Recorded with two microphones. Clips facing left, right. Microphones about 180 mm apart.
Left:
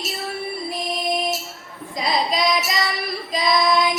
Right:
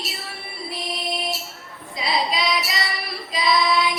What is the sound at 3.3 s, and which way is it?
Child singing, 45° left (ahead or behind).